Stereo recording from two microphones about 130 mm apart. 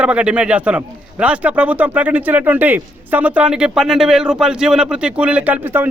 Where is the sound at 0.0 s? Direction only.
10° right (ahead or behind).